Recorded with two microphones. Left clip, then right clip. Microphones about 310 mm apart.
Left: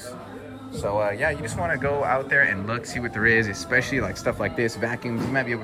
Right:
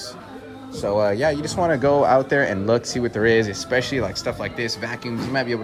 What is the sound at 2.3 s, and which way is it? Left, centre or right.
Speech, centre.